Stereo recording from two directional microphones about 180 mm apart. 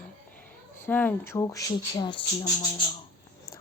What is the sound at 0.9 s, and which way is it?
Speech, 10° left (ahead or behind).